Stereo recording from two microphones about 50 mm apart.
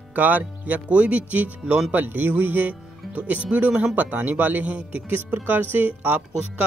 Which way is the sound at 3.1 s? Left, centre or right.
Right.